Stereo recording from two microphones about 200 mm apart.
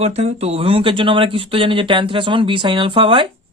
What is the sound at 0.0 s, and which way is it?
Speech, 30° right (ahead or behind).